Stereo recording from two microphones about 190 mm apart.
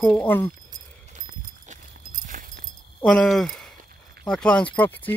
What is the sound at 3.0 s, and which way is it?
Speech, 5° left (ahead or behind).